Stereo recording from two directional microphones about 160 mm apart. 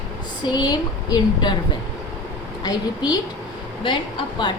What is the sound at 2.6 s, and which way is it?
A woman's voice, 25° left (ahead or behind).